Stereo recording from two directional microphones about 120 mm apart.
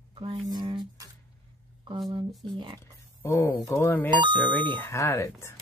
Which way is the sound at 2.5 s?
45° right (ahead or behind).